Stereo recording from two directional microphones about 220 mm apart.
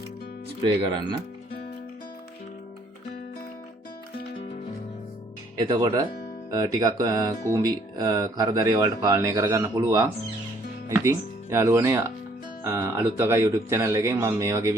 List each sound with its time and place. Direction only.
5.5 s speech: 20° right (ahead or behind)